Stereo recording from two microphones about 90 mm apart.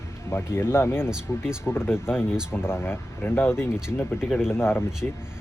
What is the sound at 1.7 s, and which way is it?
Speech, 25° left (ahead or behind).